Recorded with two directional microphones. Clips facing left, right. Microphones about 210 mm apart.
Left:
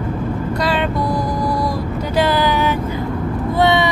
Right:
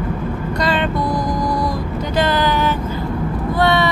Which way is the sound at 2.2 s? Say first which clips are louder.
Left 1 dB; 10° left (ahead or behind).